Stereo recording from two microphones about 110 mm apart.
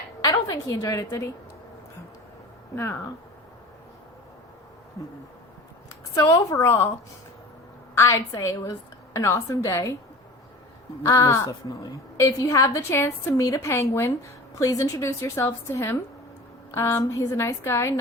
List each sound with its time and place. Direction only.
0.2 s a woman's voice: 35° left (ahead or behind)
2.7 s a woman's voice: 25° left (ahead or behind)
6.1 s a woman's voice: 30° left (ahead or behind)
7.9 s a woman's voice: 25° left (ahead or behind)
11.0 s a woman's voice: 30° left (ahead or behind)